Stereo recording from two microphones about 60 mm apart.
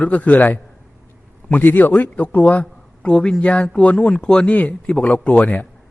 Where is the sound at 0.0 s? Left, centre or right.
Left.